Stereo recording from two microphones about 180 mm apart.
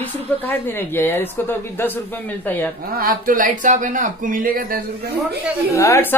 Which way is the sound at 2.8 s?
55° right (ahead or behind).